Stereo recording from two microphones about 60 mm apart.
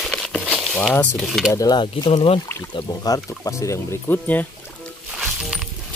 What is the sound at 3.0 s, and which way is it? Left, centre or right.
Speech, left.